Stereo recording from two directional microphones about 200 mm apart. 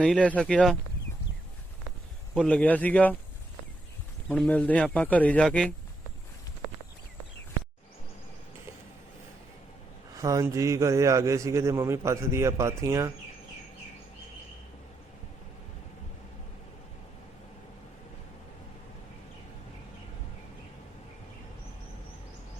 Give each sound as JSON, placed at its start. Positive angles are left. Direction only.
{"t": 0.0, "sound": "speech", "side_deg": 5}
{"t": 2.3, "sound": "speech", "side_deg": 5}
{"t": 4.3, "sound": "speech", "side_deg": 5}
{"t": 10.2, "sound": "a man's voice", "side_deg": -15}